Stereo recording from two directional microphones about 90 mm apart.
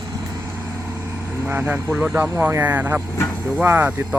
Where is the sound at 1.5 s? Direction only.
20° right (ahead or behind).